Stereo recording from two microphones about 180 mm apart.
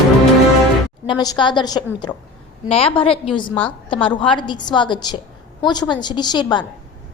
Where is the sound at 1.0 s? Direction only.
25° left (ahead or behind).